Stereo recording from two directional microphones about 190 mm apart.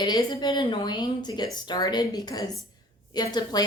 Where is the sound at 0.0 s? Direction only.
20° left (ahead or behind).